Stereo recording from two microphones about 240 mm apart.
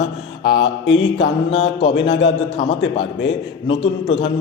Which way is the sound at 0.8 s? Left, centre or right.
Left.